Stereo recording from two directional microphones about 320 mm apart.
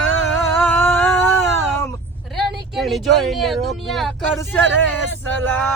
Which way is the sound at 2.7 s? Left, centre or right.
Centre.